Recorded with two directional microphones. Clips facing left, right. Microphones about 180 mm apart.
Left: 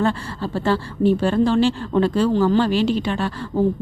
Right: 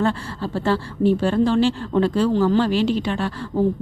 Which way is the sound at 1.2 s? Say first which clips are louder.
Left 1 dB; 35° left (ahead or behind).